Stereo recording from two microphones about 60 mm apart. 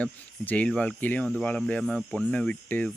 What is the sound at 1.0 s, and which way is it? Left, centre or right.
Speech, left.